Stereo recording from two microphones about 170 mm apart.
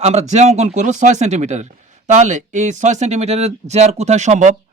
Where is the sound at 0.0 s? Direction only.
40° right (ahead or behind).